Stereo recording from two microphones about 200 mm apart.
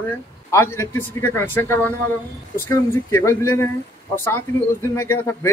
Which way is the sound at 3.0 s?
15° left (ahead or behind).